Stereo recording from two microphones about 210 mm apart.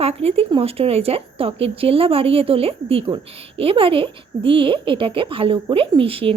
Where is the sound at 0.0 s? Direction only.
30° right (ahead or behind).